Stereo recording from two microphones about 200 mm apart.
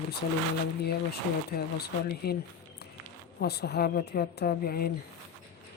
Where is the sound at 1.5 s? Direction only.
50° left (ahead or behind).